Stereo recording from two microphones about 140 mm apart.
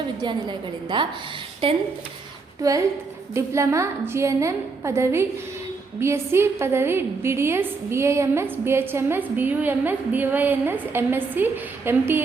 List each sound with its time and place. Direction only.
0.2 s a woman's voice: 30° right (ahead or behind)
2.6 s a woman's voice: 25° right (ahead or behind)